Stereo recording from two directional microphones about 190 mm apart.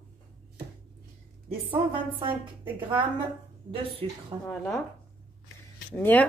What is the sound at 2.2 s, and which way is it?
Speech, 25° right (ahead or behind).